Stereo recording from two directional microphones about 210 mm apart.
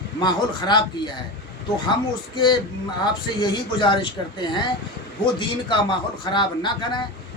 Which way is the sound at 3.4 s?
20° left (ahead or behind).